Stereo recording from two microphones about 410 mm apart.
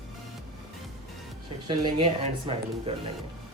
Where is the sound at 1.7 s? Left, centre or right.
Centre.